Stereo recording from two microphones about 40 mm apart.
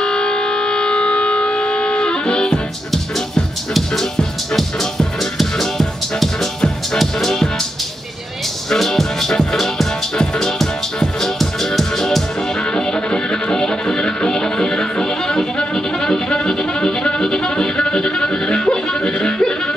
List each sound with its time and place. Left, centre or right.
0.0 s civil defense siren: left
2.9 s music: centre
8.6 s music: centre
12.7 s music: left